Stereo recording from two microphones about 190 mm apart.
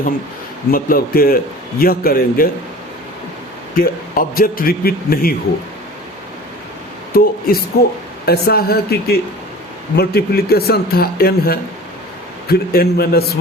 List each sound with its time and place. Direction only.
0.7 s a man's voice: 50° left (ahead or behind)
3.8 s a man's voice: 50° left (ahead or behind)
7.1 s a man's voice: 50° left (ahead or behind)